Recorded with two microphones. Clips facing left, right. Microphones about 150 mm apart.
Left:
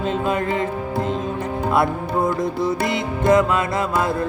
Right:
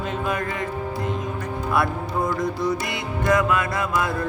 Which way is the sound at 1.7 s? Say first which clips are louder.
Left 3 dB; 25° left (ahead or behind).